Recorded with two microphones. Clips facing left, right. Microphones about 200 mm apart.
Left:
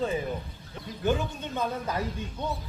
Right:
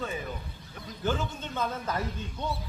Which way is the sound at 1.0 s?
15° left (ahead or behind).